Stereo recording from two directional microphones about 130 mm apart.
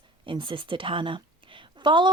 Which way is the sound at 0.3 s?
40° right (ahead or behind).